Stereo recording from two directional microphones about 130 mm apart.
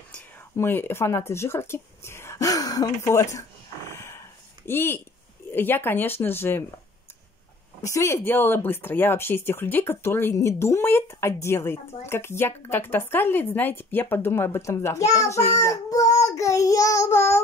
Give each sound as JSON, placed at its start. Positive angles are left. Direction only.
{"t": 0.6, "sound": "speech", "side_deg": 15}
{"t": 7.8, "sound": "child singing", "side_deg": 25}
{"t": 8.3, "sound": "speech", "side_deg": 15}
{"t": 15.1, "sound": "child singing", "side_deg": 25}